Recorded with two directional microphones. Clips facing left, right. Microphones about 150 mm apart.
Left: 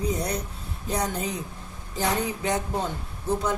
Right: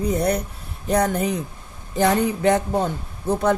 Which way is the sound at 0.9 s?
60° right (ahead or behind).